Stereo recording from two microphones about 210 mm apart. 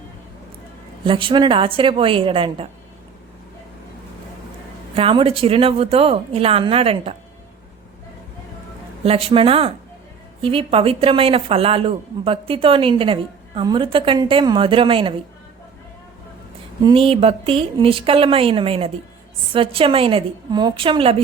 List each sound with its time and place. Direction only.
1.0 s speech: 25° right (ahead or behind)
4.9 s speech: 25° right (ahead or behind)
9.0 s speech: 25° right (ahead or behind)
16.8 s speech: 25° right (ahead or behind)